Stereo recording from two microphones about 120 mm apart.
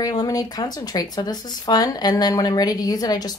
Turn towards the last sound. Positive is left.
turn(degrees=35)  # may be behind; listen again after turning